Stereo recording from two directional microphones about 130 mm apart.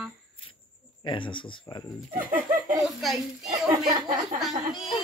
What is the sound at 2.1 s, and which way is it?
Speech, 90° right.